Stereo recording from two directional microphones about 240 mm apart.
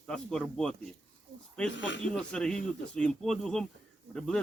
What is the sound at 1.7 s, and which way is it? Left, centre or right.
Speech, left.